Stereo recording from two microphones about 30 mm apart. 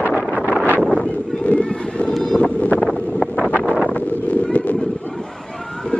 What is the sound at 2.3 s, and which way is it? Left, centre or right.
Wind noise, left.